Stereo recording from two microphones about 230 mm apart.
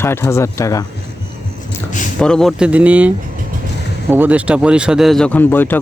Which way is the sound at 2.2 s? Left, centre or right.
Centre.